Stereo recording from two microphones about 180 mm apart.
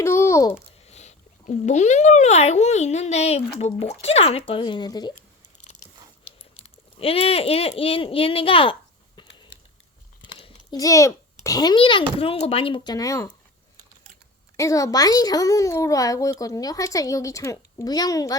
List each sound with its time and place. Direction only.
0.0 s babbling: 15° left (ahead or behind)
0.9 s a child's voice: 40° left (ahead or behind); by 5.1 s 25° left (ahead or behind)
7.0 s speech: 30° left (ahead or behind)
9.1 s a sound: 25° left (ahead or behind)
10.3 s a child's voice: 25° left (ahead or behind)
14.5 s a child's voice: 15° left (ahead or behind)